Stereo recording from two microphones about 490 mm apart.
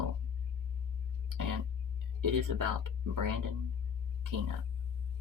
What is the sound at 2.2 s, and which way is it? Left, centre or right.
Speech, right.